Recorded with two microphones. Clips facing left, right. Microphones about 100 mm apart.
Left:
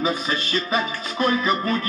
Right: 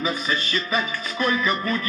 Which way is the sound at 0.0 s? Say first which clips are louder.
Left 2 dB; 30° left (ahead or behind).